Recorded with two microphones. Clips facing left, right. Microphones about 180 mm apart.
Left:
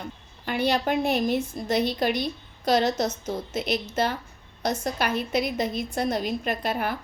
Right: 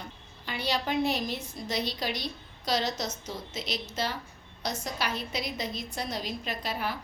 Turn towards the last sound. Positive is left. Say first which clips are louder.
# left 6 dB
turn(degrees=55)  # may be behind; listen again after turning